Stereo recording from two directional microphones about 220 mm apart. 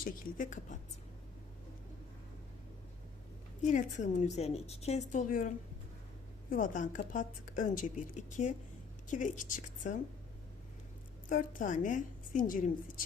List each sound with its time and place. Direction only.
0.0 s a woman's voice: 35° left (ahead or behind)
3.6 s a woman's voice: 35° left (ahead or behind)
11.3 s a woman's voice: 35° left (ahead or behind)